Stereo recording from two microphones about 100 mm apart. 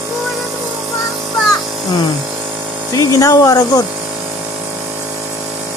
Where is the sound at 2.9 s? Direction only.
35° left (ahead or behind).